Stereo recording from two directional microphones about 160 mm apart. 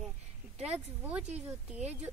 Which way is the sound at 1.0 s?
5° right (ahead or behind).